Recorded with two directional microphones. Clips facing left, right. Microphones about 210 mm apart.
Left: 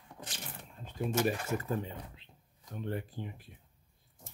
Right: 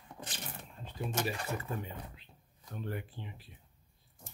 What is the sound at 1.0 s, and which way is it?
Speech, 45° left (ahead or behind).